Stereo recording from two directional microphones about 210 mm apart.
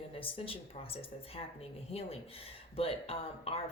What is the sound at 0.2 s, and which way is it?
Speech, 25° left (ahead or behind).